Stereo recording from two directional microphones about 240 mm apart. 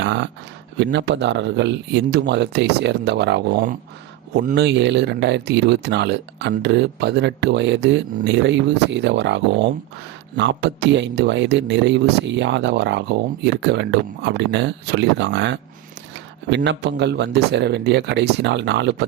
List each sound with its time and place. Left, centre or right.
0.0 s speech: right